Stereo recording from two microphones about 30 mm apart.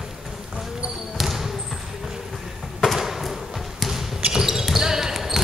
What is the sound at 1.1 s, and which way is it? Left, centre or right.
Basketball bounce, centre.